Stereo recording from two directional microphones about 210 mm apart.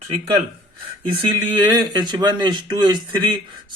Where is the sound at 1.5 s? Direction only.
20° right (ahead or behind).